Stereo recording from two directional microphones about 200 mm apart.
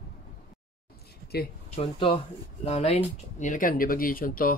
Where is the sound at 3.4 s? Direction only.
40° left (ahead or behind).